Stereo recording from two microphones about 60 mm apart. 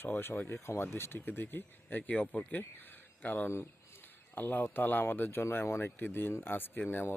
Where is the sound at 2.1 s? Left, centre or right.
Left.